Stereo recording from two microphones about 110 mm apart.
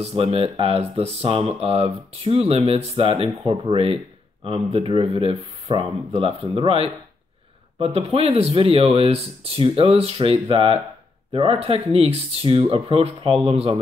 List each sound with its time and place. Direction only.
0.0 s speech: 60° right (ahead or behind)